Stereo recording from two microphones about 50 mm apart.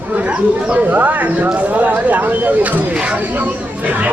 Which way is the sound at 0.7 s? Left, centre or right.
Right.